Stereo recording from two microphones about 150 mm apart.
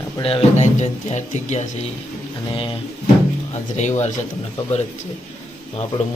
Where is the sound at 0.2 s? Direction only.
40° left (ahead or behind).